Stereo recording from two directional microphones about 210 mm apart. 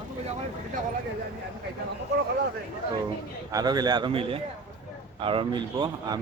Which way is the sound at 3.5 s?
20° right (ahead or behind).